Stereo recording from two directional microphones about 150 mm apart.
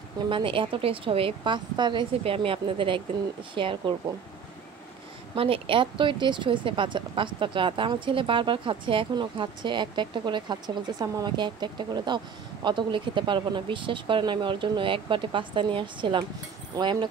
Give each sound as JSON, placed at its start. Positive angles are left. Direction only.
{"t": 0.3, "sound": "speech", "side_deg": -35}
{"t": 5.3, "sound": "speech", "side_deg": -35}